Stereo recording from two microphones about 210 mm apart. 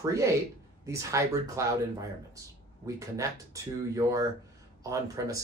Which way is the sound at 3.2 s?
15° right (ahead or behind).